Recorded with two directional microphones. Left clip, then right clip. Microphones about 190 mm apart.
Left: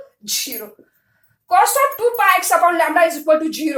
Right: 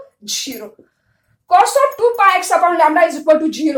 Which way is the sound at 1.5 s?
30° right (ahead or behind).